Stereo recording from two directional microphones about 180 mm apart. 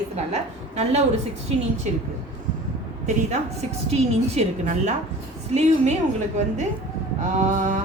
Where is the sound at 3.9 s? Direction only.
40° right (ahead or behind).